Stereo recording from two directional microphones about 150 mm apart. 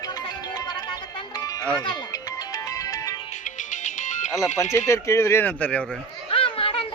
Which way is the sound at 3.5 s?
55° left (ahead or behind).